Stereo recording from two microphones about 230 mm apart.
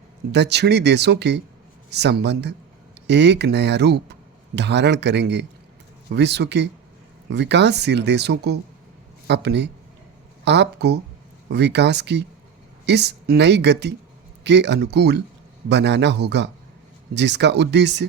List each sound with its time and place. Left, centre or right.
0.3 s speech: right